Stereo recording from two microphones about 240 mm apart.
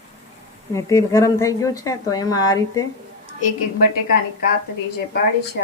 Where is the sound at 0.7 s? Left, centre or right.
Centre.